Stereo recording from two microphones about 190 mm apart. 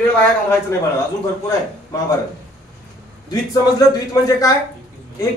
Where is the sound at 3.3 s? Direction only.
20° left (ahead or behind).